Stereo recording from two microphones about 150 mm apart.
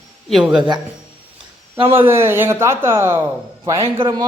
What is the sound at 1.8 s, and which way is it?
A man's voice, 15° right (ahead or behind).